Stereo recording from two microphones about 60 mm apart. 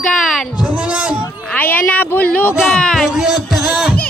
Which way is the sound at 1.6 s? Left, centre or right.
Left.